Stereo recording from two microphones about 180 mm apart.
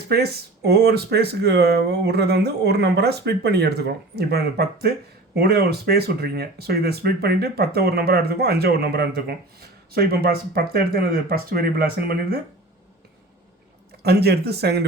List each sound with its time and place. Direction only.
0.1 s speech: 65° right (ahead or behind)
14.0 s speech: 65° right (ahead or behind)